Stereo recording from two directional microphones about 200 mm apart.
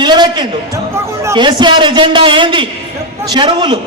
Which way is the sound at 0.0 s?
20° right (ahead or behind).